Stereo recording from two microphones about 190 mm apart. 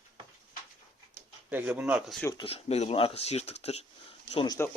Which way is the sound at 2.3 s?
30° left (ahead or behind).